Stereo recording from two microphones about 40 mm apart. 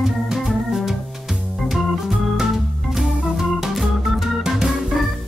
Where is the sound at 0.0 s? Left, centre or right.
Centre.